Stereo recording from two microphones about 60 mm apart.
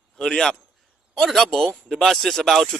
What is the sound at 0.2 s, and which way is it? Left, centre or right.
A man's voice, centre.